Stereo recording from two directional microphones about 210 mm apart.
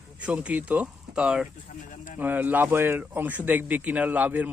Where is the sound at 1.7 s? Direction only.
35° left (ahead or behind).